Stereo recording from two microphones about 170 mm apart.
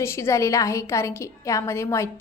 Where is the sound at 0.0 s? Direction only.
15° left (ahead or behind).